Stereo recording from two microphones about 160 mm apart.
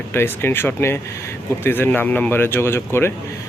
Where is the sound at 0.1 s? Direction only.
15° left (ahead or behind).